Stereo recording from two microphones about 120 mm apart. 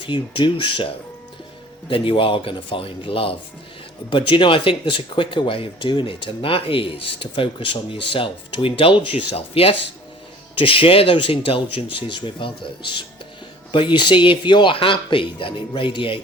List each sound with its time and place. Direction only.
0.0 s speech: 40° left (ahead or behind)
1.9 s speech: 45° left (ahead or behind)